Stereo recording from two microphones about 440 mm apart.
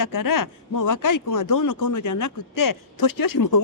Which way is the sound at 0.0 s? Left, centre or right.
Left.